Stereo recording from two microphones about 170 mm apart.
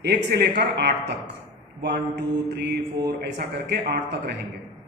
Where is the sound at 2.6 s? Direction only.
85° right.